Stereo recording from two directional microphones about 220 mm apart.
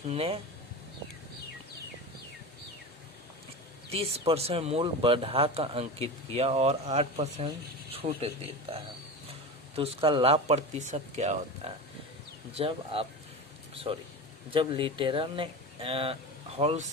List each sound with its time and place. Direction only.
0.1 s speech: 25° right (ahead or behind)
3.9 s speech: 25° right (ahead or behind)
9.7 s speech: 25° right (ahead or behind)
14.5 s speech: 25° right (ahead or behind)